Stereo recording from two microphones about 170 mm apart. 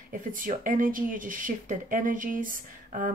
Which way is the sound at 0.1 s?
55° right (ahead or behind).